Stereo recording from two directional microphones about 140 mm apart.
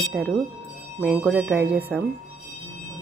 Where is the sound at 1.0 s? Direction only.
10° right (ahead or behind).